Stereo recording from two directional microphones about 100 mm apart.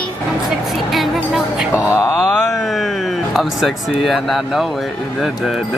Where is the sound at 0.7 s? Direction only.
Centre (ahead or behind).